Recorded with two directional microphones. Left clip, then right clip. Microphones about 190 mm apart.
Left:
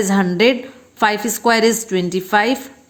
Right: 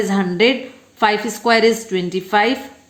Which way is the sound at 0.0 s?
25° left (ahead or behind).